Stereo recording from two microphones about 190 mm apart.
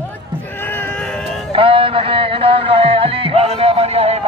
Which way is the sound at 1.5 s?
30° right (ahead or behind).